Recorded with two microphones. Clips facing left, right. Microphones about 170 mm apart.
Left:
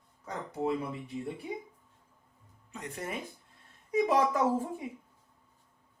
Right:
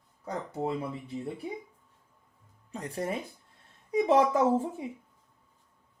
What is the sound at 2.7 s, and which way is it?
A woman's voice, 35° right (ahead or behind).